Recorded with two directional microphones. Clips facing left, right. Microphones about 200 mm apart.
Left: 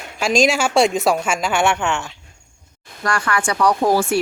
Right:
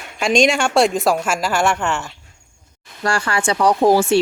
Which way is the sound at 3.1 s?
25° right (ahead or behind).